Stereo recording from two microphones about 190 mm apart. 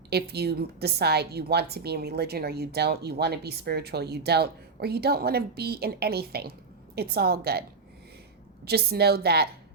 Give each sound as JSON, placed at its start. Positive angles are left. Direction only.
{"t": 0.1, "sound": "a woman's voice", "side_deg": -60}
{"t": 8.6, "sound": "a woman's voice", "side_deg": -55}